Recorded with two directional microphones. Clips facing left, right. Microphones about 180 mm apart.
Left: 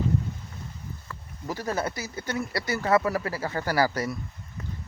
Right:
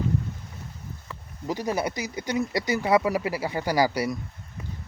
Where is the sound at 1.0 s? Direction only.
15° right (ahead or behind).